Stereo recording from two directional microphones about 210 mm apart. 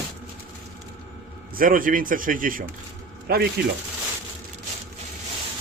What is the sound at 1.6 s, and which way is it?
Speech, 40° right (ahead or behind).